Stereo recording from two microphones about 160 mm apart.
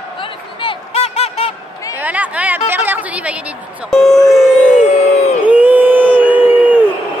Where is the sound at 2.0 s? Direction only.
10° right (ahead or behind).